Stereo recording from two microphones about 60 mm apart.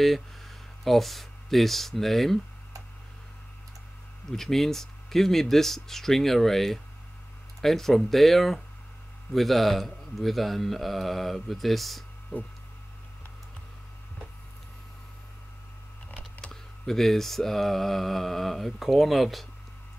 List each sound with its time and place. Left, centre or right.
0.0 s speech: centre
4.3 s a man's voice: centre
16.8 s a man's voice: centre